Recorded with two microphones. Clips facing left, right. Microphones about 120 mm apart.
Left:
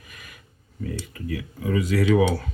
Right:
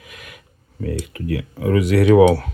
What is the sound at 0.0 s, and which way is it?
Speech, 80° right.